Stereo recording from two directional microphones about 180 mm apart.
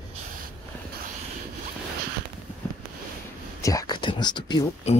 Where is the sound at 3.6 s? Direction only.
20° left (ahead or behind).